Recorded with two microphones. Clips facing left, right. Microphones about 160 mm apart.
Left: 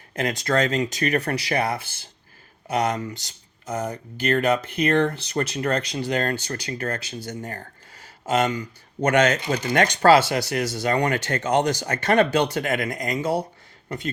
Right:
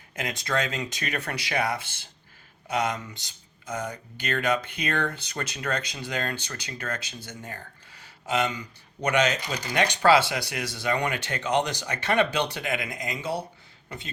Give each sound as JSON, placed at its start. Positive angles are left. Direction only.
{"t": 0.1, "sound": "speech", "side_deg": 40}